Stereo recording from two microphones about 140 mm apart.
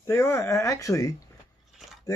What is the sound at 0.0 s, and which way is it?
Speech, 20° left (ahead or behind).